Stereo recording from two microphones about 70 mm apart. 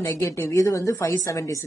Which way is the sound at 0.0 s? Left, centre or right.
Left.